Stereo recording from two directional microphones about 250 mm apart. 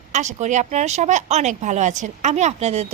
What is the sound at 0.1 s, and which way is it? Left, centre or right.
A woman's voice, right.